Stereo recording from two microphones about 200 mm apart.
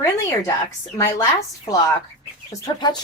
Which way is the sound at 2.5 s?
20° left (ahead or behind).